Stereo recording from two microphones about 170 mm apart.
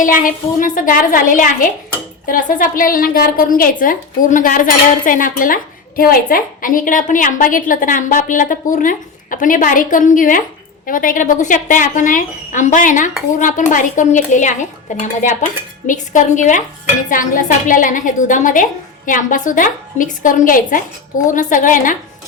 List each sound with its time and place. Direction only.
0.0 s a woman's voice: 50° left (ahead or behind)